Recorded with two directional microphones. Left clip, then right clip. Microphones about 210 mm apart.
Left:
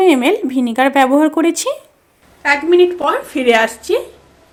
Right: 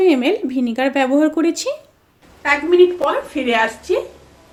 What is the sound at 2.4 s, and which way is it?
Speech, 50° left (ahead or behind).